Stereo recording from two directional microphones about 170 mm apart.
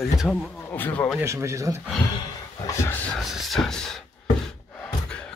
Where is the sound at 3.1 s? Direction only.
Centre (ahead or behind).